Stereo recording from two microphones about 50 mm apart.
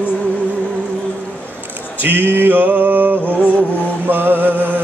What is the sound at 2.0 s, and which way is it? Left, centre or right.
Male singing, right.